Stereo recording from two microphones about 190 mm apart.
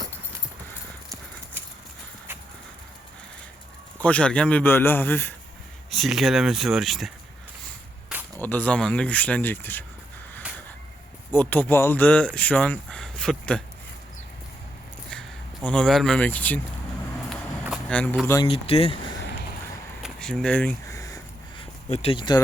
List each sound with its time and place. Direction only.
4.0 s speech: 5° left (ahead or behind)
5.9 s speech: centre (ahead or behind)
8.4 s speech: 10° left (ahead or behind)
11.3 s speech: 10° left (ahead or behind)
15.6 s speech: 5° left (ahead or behind)
17.2 s a sound: centre (ahead or behind)
18.4 s speech: 30° left (ahead or behind)
20.0 s a sound: centre (ahead or behind)
21.8 s speech: 30° left (ahead or behind)